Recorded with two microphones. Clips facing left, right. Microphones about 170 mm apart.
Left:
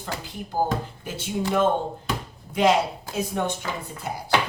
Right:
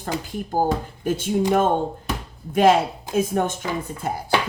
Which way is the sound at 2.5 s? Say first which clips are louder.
Right 4 dB; 50° right (ahead or behind).